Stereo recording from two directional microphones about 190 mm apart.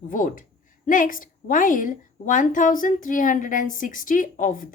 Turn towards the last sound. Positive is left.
turn(degrees=45)  # may be behind; listen again after turning